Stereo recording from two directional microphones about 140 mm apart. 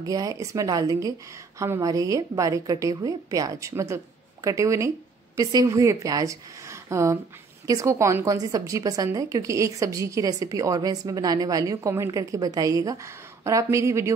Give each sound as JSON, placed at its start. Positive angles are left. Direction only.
{"t": 0.0, "sound": "a woman's voice", "side_deg": -25}